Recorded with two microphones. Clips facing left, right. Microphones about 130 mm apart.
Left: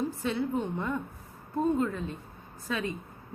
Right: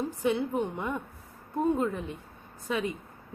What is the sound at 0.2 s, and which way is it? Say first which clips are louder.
A woman's voice: right 2 dB; 15° right (ahead or behind).